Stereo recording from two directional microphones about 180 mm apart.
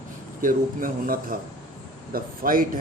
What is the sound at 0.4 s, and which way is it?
A man's voice, 50° right (ahead or behind).